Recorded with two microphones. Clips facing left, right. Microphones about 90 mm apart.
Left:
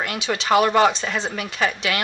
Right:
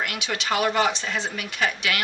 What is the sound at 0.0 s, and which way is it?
Speech, 30° left (ahead or behind).